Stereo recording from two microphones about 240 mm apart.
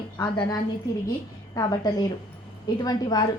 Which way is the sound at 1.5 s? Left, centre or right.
Centre.